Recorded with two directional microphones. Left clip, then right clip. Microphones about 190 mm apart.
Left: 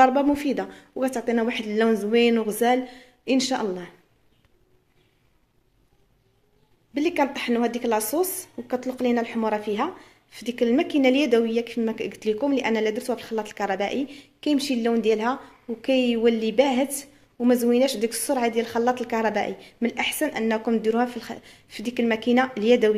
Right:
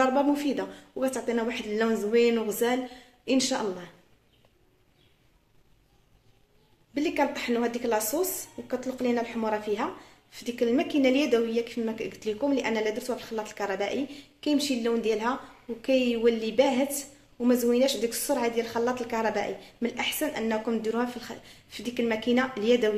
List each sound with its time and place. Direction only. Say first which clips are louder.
0.0 s speech: left 6 dB; 35° left (ahead or behind)
6.9 s speech: left 3 dB; 40° left (ahead or behind)